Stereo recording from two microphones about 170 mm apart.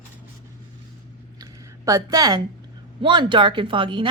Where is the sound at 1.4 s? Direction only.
20° right (ahead or behind).